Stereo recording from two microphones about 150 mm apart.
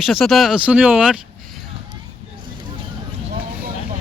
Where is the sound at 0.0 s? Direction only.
Centre (ahead or behind).